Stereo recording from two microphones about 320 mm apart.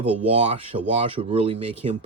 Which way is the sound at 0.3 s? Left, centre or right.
Centre.